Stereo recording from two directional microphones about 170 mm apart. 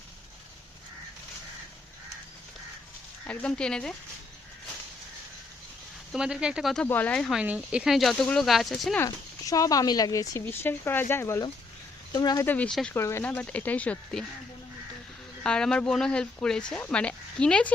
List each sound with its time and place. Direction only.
3.2 s speech: 5° left (ahead or behind)
6.1 s speech: 5° right (ahead or behind)
6.8 s speech: 10° left (ahead or behind)
9.0 s speech: 20° left (ahead or behind)
12.5 s speech: 5° left (ahead or behind)
13.0 s speech: 15° left (ahead or behind)
15.4 s speech: 5° left (ahead or behind)